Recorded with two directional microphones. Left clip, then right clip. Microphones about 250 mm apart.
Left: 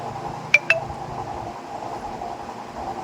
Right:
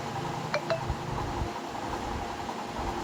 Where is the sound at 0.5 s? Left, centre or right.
Left.